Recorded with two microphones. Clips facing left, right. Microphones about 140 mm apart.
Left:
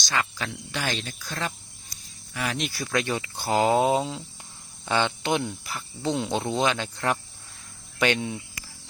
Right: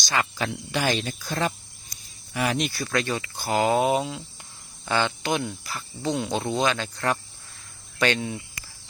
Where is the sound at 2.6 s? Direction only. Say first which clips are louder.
Right 1 dB; 10° left (ahead or behind).